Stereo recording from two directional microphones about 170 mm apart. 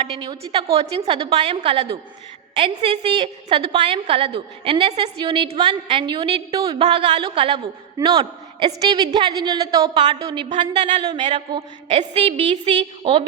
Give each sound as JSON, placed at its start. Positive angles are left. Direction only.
{"t": 0.0, "sound": "a woman's voice", "side_deg": -30}